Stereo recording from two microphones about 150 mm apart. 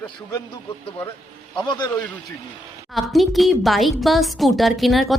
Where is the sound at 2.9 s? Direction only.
Centre (ahead or behind).